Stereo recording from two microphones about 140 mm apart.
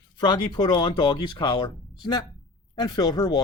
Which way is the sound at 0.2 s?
30° left (ahead or behind).